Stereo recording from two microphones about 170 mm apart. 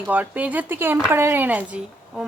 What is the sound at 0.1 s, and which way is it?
A woman's voice, 10° right (ahead or behind).